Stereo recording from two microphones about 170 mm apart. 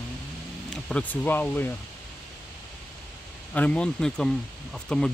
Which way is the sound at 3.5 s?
10° left (ahead or behind).